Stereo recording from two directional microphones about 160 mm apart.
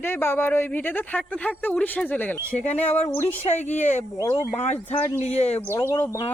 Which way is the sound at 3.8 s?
50° left (ahead or behind).